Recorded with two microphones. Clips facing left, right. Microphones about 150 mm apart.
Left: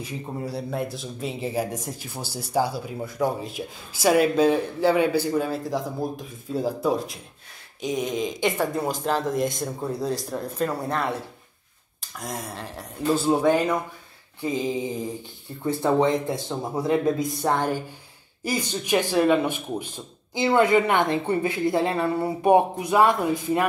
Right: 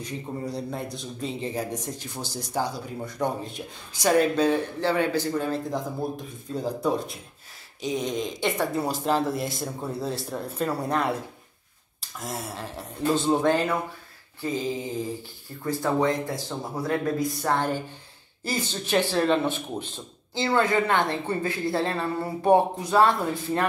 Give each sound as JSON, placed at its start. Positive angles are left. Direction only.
{"t": 0.0, "sound": "speech", "side_deg": 5}
{"t": 12.2, "sound": "speech", "side_deg": -5}